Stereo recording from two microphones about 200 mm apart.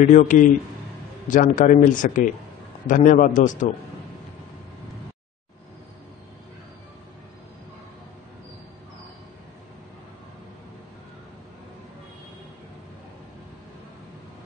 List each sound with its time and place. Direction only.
0.0 s speech: 40° left (ahead or behind)